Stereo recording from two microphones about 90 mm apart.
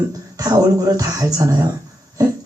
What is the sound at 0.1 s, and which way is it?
Speech, 40° right (ahead or behind).